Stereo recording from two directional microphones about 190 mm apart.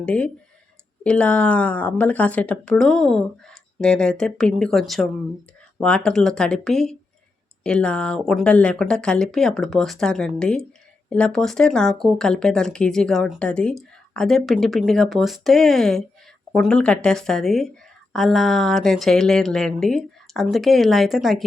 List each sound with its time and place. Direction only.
0.0 s speech: 5° left (ahead or behind)